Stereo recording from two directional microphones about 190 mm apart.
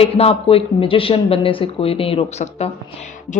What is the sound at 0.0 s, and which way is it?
A woman's voice, 30° left (ahead or behind).